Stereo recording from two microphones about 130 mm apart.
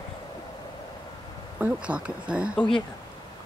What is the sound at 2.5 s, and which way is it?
Speech, 5° left (ahead or behind).